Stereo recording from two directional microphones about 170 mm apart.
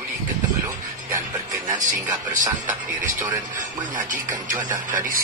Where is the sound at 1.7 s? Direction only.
50° right (ahead or behind).